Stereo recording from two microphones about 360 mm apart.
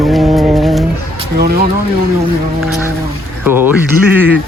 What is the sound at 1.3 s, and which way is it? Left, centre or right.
Speech, right.